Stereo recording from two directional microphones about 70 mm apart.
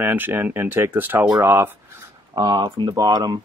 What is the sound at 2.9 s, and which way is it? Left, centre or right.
Speech, right.